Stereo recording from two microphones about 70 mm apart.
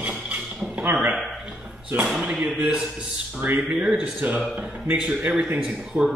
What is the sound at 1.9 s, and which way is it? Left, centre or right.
A man's voice, centre.